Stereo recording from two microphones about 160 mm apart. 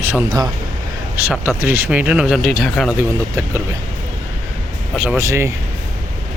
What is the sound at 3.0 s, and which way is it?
Speech, 20° right (ahead or behind).